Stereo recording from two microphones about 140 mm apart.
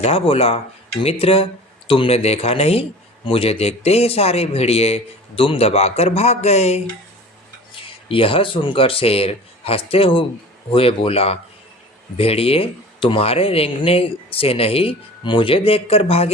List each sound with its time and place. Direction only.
0.0 s speech: 45° left (ahead or behind)
8.0 s speech: 40° left (ahead or behind)